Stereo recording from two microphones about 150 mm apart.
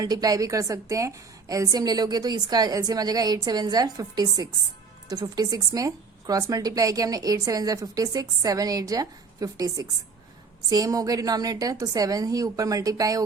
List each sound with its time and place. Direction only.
0.0 s a woman's voice: 25° right (ahead or behind)